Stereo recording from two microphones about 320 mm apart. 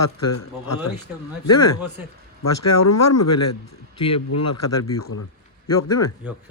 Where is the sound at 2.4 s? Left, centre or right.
Left.